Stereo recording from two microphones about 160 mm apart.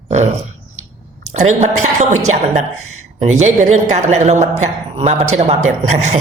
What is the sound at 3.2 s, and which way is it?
A woman's voice, 45° right (ahead or behind).